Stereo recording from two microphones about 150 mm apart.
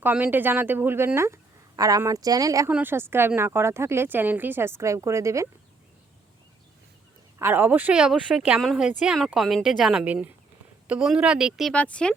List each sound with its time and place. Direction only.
0.0 s a woman's voice: 10° right (ahead or behind)
7.3 s a woman's voice: 15° right (ahead or behind)
11.7 s speech: 10° left (ahead or behind)